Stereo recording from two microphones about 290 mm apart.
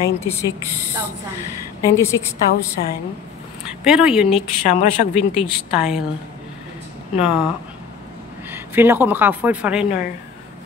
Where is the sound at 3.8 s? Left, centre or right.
Centre.